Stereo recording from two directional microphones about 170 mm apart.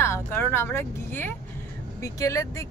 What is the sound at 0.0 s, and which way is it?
Speech, 15° left (ahead or behind).